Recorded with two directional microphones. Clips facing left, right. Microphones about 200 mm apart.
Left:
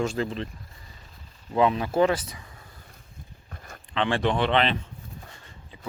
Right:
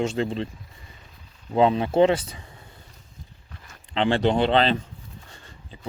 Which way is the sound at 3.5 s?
50° left (ahead or behind).